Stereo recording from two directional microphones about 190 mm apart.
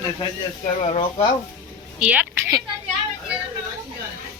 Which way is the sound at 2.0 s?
5° right (ahead or behind).